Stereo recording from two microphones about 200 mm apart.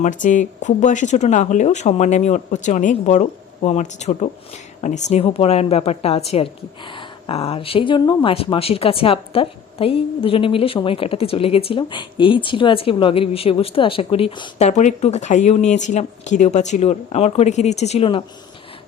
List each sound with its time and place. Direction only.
0.0 s speech: 40° left (ahead or behind)
14.7 s speech: 35° left (ahead or behind)